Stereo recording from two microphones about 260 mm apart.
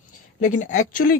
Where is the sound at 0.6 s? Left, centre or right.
Left.